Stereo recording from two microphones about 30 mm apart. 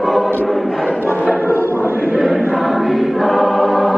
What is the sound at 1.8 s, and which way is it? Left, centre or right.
Choir, right.